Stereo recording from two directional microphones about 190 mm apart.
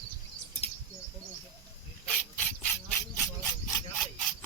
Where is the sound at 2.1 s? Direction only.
10° left (ahead or behind).